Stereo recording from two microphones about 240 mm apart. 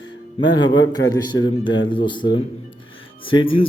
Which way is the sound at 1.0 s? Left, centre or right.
Centre.